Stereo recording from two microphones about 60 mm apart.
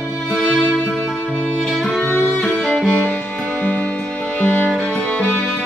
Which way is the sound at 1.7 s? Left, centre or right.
Centre.